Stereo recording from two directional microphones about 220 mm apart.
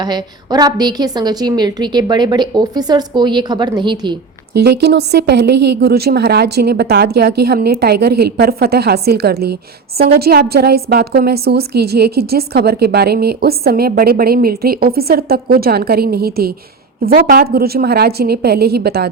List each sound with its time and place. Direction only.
0.0 s a woman's voice: 20° right (ahead or behind)
4.5 s a woman's voice: 50° right (ahead or behind)